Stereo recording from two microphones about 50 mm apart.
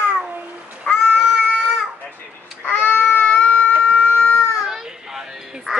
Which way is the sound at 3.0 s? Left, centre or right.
Left.